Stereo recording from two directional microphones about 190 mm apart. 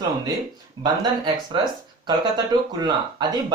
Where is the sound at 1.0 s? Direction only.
20° right (ahead or behind).